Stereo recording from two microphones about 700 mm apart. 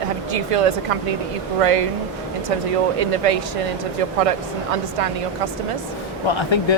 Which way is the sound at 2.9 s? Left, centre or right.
Right.